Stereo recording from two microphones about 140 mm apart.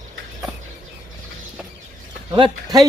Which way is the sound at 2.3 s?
30° right (ahead or behind).